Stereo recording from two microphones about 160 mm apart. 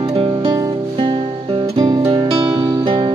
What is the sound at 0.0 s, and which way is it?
Music, 35° right (ahead or behind).